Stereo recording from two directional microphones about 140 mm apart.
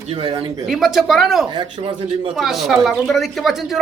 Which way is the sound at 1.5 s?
35° right (ahead or behind).